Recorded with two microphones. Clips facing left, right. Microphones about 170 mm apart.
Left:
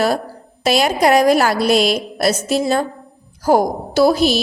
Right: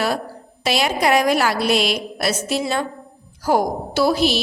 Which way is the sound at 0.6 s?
45° left (ahead or behind).